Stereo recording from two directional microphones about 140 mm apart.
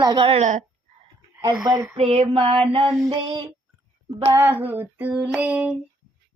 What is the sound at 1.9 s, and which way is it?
Female singing, 45° right (ahead or behind).